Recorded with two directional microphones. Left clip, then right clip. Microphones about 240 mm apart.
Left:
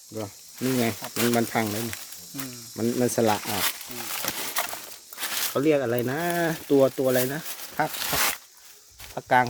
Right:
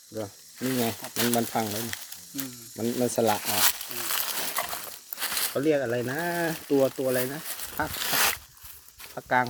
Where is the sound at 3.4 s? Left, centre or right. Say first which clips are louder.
Right 2 dB; right.